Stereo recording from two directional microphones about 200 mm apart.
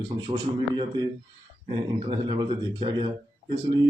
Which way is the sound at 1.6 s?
25° right (ahead or behind).